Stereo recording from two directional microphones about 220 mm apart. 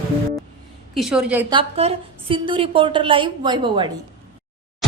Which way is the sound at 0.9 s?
Centre (ahead or behind).